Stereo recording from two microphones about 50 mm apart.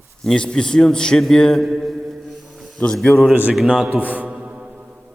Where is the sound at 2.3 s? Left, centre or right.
Centre.